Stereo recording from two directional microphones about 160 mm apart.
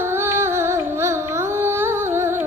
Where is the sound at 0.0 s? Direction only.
15° right (ahead or behind).